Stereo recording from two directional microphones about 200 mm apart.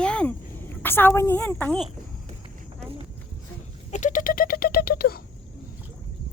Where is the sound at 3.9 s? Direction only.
40° left (ahead or behind).